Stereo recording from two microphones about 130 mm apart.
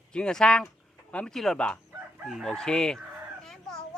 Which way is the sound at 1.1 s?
5° left (ahead or behind).